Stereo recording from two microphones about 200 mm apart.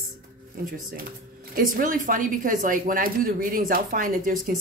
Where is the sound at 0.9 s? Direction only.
45° right (ahead or behind).